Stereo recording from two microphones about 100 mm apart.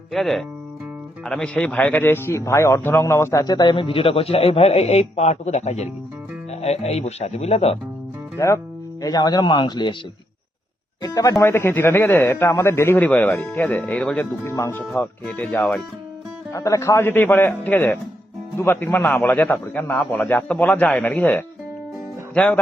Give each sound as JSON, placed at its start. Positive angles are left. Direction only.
{"t": 0.1, "sound": "a man's voice", "side_deg": 0}
{"t": 3.4, "sound": "a man's voice", "side_deg": 45}
{"t": 8.4, "sound": "speech", "side_deg": 30}
{"t": 11.0, "sound": "a man's voice", "side_deg": 35}
{"t": 13.1, "sound": "a man's voice", "side_deg": 15}
{"t": 14.4, "sound": "a man's voice", "side_deg": 30}
{"t": 15.3, "sound": "a man's voice", "side_deg": 10}
{"t": 16.5, "sound": "a man's voice", "side_deg": 35}